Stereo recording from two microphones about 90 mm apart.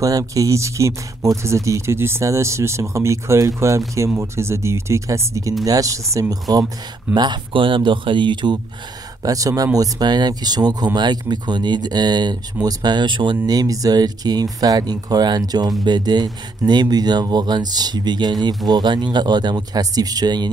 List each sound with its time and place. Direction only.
0.0 s speech: 40° right (ahead or behind)
7.2 s speech: 65° right (ahead or behind)
9.2 s speech: 40° right (ahead or behind); by 13.4 s 60° right (ahead or behind)
13.5 s speech: 45° right (ahead or behind)